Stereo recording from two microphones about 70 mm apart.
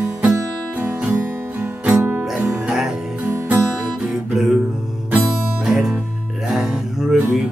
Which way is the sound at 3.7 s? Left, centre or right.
Centre.